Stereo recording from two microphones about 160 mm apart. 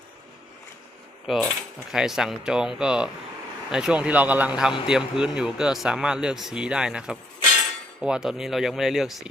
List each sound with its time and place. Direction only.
1.3 s speech: centre (ahead or behind)